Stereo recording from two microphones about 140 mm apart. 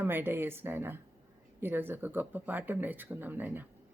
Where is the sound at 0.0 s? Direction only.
15° right (ahead or behind).